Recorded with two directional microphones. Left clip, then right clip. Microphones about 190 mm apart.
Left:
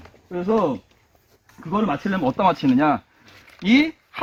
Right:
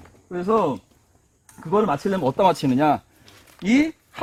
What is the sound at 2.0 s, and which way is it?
Speech, 65° right (ahead or behind).